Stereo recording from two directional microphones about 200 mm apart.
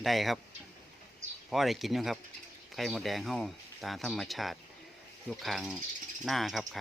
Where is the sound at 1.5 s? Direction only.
Centre (ahead or behind).